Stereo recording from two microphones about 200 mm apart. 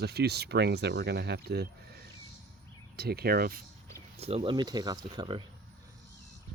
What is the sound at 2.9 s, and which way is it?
Speech, 50° right (ahead or behind).